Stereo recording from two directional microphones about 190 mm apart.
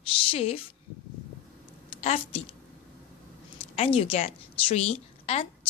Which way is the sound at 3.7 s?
30° left (ahead or behind).